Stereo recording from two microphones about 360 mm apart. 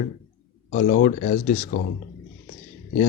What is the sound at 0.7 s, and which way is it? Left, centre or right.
Speech, left.